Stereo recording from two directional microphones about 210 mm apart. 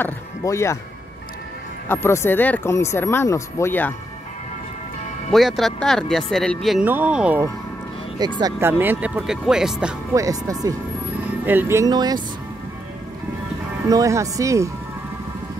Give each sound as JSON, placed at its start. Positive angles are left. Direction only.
{"t": 0.0, "sound": "speech", "side_deg": 15}
{"t": 1.9, "sound": "speech", "side_deg": 10}
{"t": 5.3, "sound": "speech", "side_deg": 0}
{"t": 10.1, "sound": "speech", "side_deg": -15}
{"t": 13.8, "sound": "speech", "side_deg": -15}